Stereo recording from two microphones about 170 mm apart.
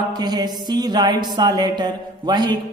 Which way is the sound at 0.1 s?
25° right (ahead or behind).